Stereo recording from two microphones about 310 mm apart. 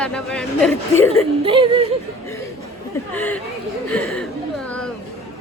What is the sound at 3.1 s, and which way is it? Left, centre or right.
A woman's voice, centre.